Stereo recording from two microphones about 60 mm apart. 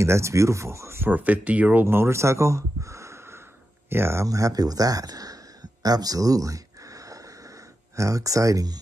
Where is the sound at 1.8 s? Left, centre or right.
Right.